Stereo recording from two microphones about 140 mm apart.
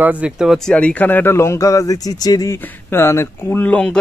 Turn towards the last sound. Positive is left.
turn(degrees=10)  # may be behind; listen again after turning